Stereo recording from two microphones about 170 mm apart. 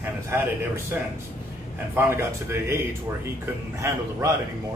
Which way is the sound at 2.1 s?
15° right (ahead or behind).